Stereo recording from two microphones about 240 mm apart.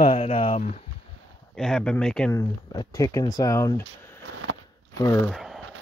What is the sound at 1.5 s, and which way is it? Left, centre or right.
Speech, centre.